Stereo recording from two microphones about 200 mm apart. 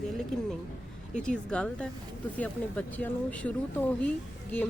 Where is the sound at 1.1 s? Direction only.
5° left (ahead or behind).